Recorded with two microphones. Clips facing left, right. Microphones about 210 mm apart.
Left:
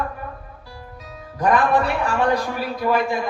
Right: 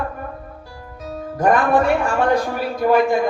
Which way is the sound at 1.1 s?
45° right (ahead or behind).